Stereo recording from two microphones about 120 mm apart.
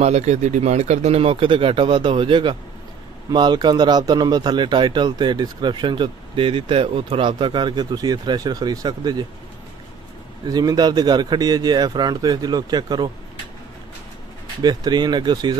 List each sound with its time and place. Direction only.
0.0 s speech: 65° right (ahead or behind); by 9.2 s 35° right (ahead or behind)
10.5 s speech: 35° right (ahead or behind)
14.6 s speech: 35° right (ahead or behind)